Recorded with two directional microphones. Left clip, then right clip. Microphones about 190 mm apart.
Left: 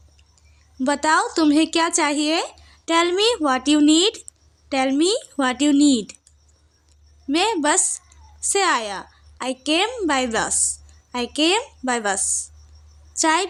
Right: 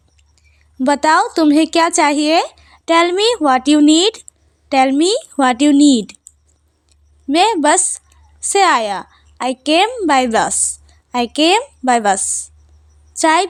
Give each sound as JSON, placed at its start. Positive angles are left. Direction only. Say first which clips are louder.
{"t": 0.8, "sound": "speech", "louder": "right 6 dB", "side_deg": -30}
{"t": 7.3, "sound": "a woman's voice", "louder": "right 7 dB", "side_deg": -30}